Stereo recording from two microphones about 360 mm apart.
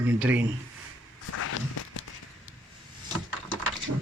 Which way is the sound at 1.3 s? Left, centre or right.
Left.